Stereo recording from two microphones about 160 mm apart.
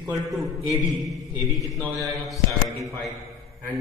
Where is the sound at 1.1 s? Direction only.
Centre (ahead or behind).